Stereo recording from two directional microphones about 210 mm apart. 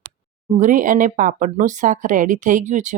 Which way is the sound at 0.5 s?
35° right (ahead or behind).